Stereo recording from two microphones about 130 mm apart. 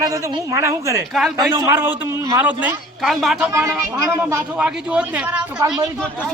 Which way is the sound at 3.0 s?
Centre (ahead or behind).